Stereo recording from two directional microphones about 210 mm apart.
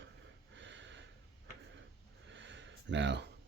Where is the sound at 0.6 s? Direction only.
60° right (ahead or behind).